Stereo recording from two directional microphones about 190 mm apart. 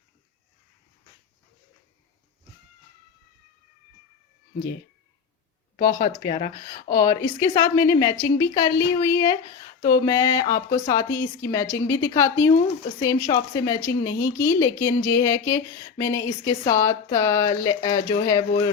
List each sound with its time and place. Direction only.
5.7 s speech: 25° left (ahead or behind)